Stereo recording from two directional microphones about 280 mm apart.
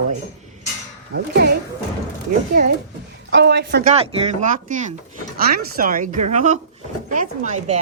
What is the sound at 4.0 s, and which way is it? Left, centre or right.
Speech, right.